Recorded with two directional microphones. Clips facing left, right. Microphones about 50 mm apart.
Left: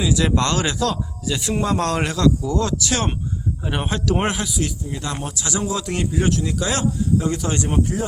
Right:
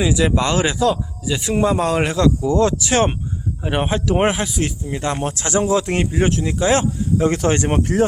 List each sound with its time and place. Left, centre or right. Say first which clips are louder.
0.2 s speech: right 3 dB; centre
2.1 s speech: right 2 dB; right
4.4 s speech: right 2 dB; right
7.3 s speech: right 5 dB; right